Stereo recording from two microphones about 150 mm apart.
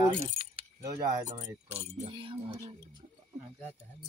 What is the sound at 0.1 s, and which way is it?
Speech, 40° right (ahead or behind).